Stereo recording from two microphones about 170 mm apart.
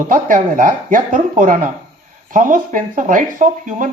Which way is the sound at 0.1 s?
50° right (ahead or behind).